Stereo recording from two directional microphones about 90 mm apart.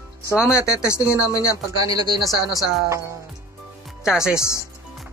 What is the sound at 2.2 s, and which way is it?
Speech, 45° left (ahead or behind).